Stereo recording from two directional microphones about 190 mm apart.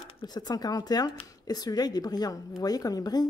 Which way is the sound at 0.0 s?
25° left (ahead or behind).